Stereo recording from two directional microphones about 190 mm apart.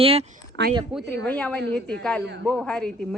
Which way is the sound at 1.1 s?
5° left (ahead or behind).